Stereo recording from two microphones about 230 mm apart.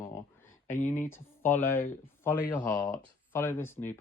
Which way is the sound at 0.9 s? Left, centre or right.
Centre.